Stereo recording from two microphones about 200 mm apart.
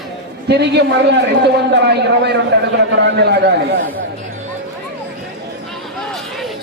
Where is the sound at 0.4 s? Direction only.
55° right (ahead or behind).